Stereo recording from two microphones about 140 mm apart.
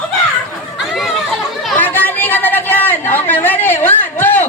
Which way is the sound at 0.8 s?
Centre (ahead or behind).